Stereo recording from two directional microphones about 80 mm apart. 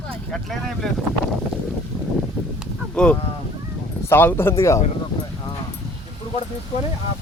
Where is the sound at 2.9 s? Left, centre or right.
Centre.